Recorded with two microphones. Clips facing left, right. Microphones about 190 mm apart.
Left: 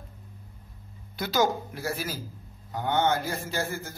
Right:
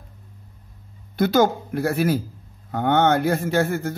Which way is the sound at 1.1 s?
55° right (ahead or behind).